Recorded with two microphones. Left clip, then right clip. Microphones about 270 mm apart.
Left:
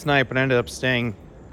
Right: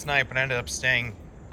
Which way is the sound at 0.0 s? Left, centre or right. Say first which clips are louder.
Left 4 dB; centre.